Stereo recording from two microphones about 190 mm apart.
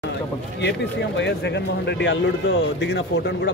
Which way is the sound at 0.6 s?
70° left (ahead or behind).